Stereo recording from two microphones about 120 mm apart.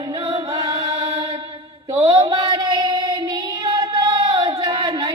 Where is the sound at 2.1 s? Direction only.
35° right (ahead or behind).